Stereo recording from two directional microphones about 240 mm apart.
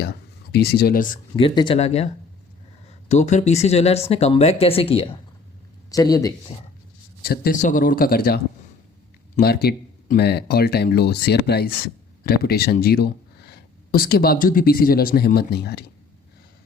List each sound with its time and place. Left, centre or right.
0.0 s speech: left
1.4 s speech: left
3.1 s speech: left
7.2 s speech: left
9.4 s speech: left